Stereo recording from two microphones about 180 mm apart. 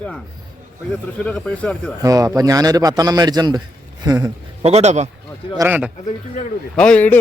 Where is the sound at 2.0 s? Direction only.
20° right (ahead or behind).